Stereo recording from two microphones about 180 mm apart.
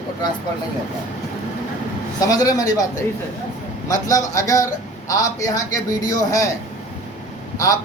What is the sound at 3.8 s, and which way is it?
A man's voice, 20° left (ahead or behind).